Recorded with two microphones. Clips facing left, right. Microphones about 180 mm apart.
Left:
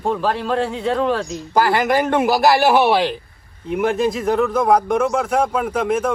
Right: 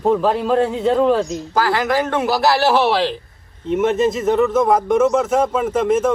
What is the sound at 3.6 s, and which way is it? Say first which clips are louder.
A man's voice: right 2 dB; centre (ahead or behind).